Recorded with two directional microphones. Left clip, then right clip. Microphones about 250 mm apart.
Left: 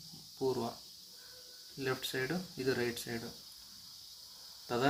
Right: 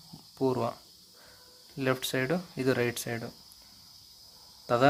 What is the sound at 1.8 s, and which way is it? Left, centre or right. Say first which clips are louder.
Speech: right 7 dB; right.